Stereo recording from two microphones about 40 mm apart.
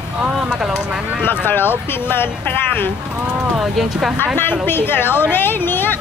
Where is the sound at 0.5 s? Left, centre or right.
Centre.